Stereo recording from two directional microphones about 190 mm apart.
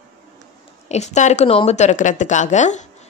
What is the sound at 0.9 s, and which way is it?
Speech, 35° left (ahead or behind).